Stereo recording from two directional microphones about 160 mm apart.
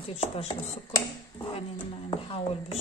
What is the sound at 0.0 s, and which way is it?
Speech, 40° left (ahead or behind).